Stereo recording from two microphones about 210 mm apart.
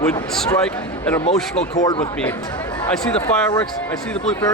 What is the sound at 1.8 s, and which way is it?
Speech, 20° left (ahead or behind).